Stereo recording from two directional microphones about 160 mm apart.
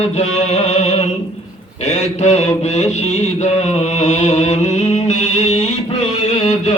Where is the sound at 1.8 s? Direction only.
45° left (ahead or behind).